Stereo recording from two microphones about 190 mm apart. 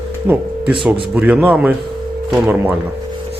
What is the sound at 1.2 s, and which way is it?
Speech, 5° right (ahead or behind).